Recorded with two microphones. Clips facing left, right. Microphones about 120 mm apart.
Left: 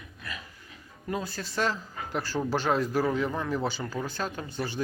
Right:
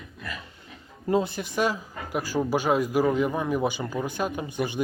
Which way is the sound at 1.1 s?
20° right (ahead or behind).